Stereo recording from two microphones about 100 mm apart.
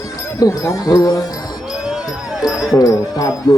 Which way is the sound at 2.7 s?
35° left (ahead or behind).